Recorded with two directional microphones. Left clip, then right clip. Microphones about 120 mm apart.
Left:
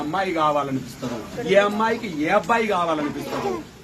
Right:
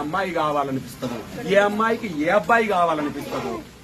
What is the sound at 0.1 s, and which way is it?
A man's voice, 30° right (ahead or behind).